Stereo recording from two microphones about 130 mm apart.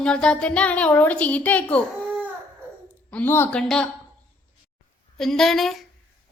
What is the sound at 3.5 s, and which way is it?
Speech, 5° left (ahead or behind).